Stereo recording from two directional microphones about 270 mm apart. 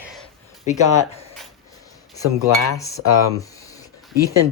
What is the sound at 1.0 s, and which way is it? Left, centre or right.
Speech, left.